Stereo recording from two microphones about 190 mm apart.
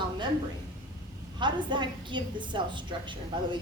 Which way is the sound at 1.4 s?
25° right (ahead or behind).